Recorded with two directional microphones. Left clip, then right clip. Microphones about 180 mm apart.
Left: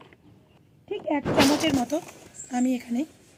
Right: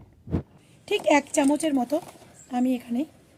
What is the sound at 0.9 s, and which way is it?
Speech, 35° right (ahead or behind).